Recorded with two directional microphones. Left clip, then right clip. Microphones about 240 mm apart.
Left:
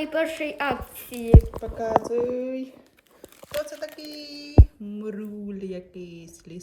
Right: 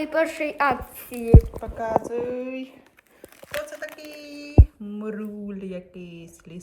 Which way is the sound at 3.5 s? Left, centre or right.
Centre.